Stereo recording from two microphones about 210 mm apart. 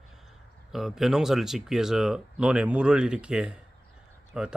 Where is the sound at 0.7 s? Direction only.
Centre (ahead or behind).